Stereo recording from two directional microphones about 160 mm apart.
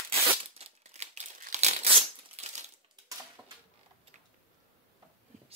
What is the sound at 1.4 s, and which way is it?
Crumpling, 45° right (ahead or behind).